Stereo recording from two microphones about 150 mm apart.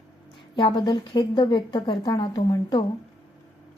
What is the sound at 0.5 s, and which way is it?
A woman's voice, 30° left (ahead or behind).